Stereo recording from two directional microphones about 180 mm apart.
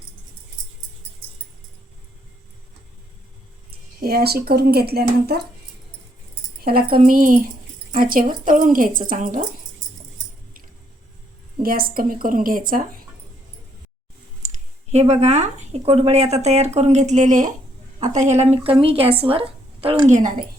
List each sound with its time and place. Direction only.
4.0 s speech: 60° right (ahead or behind)
6.7 s speech: 55° right (ahead or behind)
11.6 s speech: 55° right (ahead or behind)
14.4 s speech: 40° right (ahead or behind)